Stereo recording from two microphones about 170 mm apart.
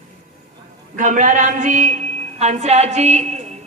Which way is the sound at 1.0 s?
50° right (ahead or behind).